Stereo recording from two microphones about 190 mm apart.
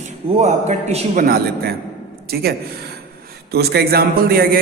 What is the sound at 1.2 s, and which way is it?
A man's voice, 55° right (ahead or behind).